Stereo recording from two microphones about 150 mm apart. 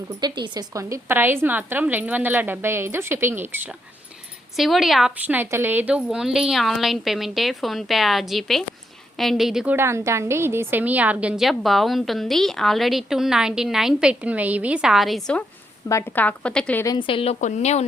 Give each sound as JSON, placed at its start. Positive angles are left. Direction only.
{"t": 0.2, "sound": "a woman's voice", "side_deg": -30}
{"t": 4.5, "sound": "a woman's voice", "side_deg": 0}
{"t": 5.2, "sound": "a woman's voice", "side_deg": -10}
{"t": 9.7, "sound": "a woman's voice", "side_deg": -15}
{"t": 15.9, "sound": "speech", "side_deg": 15}
{"t": 16.8, "sound": "speech", "side_deg": 30}
{"t": 17.4, "sound": "speech", "side_deg": 50}